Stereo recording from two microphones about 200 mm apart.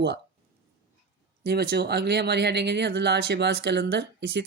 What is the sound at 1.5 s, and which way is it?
Speech, 50° right (ahead or behind).